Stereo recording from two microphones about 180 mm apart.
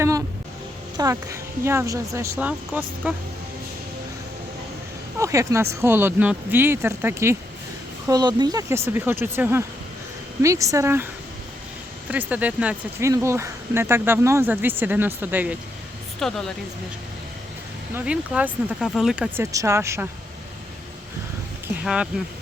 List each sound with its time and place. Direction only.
0.9 s speech: 15° right (ahead or behind)
5.2 s speech: 15° right (ahead or behind)
16.2 s speech: centre (ahead or behind)
17.9 s speech: 5° right (ahead or behind)
19.4 s speech: 15° right (ahead or behind)
21.8 s speech: 5° right (ahead or behind)